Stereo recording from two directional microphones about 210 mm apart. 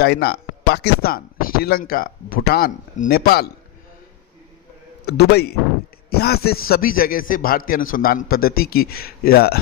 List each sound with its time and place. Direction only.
0.0 s speech: 50° left (ahead or behind)
5.0 s speech: 50° left (ahead or behind)